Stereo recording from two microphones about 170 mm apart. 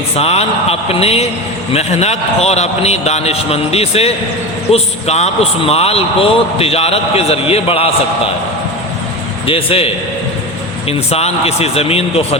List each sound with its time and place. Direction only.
0.2 s a man's voice: 35° left (ahead or behind)
9.5 s a man's voice: 35° left (ahead or behind)